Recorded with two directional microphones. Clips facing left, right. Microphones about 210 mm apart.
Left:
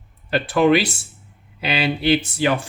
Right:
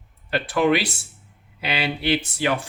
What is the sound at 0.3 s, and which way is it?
Speech, 30° left (ahead or behind).